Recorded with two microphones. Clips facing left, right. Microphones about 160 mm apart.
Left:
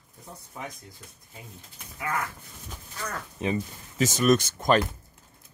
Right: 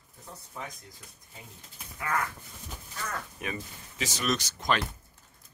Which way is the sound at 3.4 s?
25° left (ahead or behind).